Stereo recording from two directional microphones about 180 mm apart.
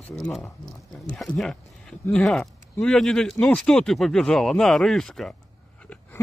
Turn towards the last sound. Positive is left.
turn(degrees=0)  # may be behind; listen again after turning